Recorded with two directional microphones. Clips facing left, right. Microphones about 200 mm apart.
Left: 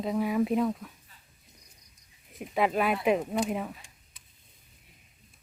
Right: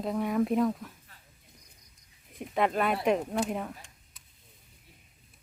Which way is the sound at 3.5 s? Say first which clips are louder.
Left 2 dB; 5° left (ahead or behind).